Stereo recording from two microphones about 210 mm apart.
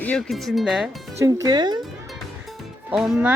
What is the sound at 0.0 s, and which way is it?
Speech, 5° left (ahead or behind).